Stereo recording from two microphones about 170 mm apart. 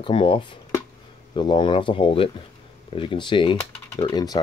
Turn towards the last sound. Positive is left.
turn(degrees=25)  # may be behind; listen again after turning